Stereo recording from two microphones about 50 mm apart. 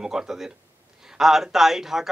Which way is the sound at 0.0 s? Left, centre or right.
Centre.